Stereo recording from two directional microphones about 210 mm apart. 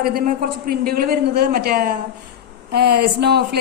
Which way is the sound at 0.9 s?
45° right (ahead or behind).